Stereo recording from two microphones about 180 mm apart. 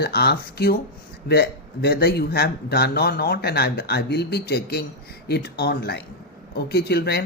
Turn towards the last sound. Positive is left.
turn(degrees=60)  # may be behind; listen again after turning